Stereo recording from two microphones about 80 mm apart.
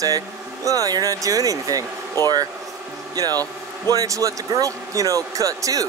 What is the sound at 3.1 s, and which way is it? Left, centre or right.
Speech, right.